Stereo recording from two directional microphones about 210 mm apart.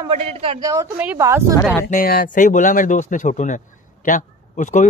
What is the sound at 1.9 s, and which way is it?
Speech, 45° left (ahead or behind).